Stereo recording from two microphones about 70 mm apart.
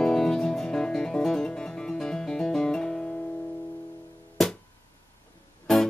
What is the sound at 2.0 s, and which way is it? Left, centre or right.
Music, centre.